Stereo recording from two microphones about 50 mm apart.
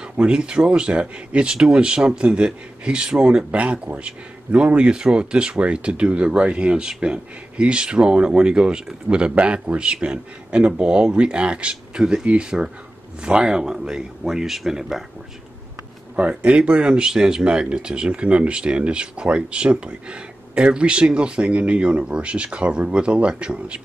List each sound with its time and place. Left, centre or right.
0.0 s speech: centre
16.2 s speech: right